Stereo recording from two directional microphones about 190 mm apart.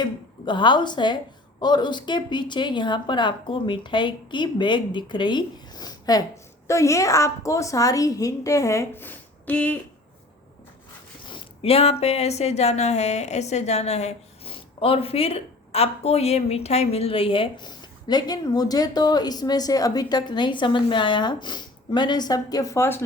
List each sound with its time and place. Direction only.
0.0 s speech: 25° left (ahead or behind); by 9.7 s 10° left (ahead or behind)
11.3 s speech: 30° left (ahead or behind); by 23.0 s 15° left (ahead or behind)